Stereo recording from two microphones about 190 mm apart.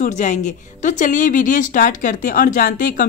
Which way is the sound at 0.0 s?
40° left (ahead or behind).